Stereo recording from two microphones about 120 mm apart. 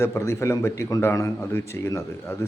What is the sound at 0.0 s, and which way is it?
A man's voice, 20° left (ahead or behind).